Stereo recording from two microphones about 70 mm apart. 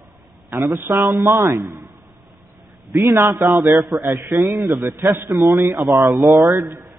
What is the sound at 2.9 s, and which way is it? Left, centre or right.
Speech, right.